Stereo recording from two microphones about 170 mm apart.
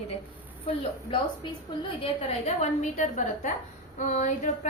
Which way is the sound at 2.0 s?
40° left (ahead or behind).